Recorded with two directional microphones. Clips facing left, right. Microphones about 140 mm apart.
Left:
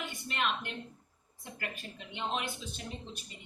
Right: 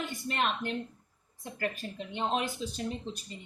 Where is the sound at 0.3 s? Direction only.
40° right (ahead or behind).